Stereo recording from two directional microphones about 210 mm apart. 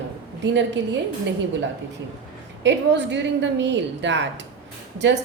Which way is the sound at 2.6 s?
60° right (ahead or behind).